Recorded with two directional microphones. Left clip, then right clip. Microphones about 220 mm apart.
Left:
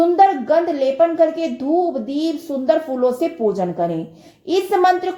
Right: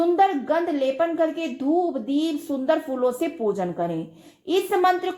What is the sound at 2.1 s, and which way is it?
Speech, 15° right (ahead or behind).